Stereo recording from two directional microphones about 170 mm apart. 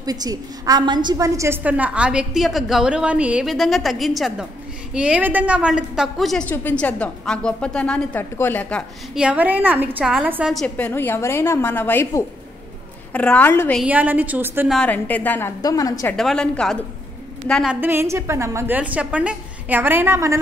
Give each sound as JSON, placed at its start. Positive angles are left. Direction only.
{"t": 0.0, "sound": "a woman's voice", "side_deg": -20}
{"t": 9.1, "sound": "a woman's voice", "side_deg": -5}
{"t": 10.9, "sound": "a woman's voice", "side_deg": 15}
{"t": 13.7, "sound": "a woman's voice", "side_deg": -10}
{"t": 14.7, "sound": "a woman's voice", "side_deg": 5}
{"t": 16.2, "sound": "a woman's voice", "side_deg": 5}
{"t": 17.7, "sound": "a woman's voice", "side_deg": -15}